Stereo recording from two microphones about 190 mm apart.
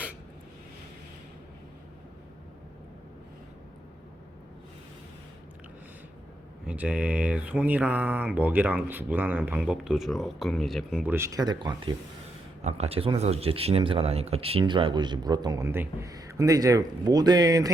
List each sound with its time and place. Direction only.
6.7 s speech: 5° right (ahead or behind); by 11.9 s 20° right (ahead or behind)
12.6 s a man's voice: 35° right (ahead or behind)